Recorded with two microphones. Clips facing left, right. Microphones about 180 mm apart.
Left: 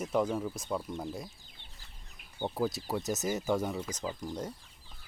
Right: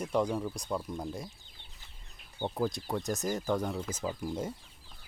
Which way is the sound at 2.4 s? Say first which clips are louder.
Even; 5° left (ahead or behind).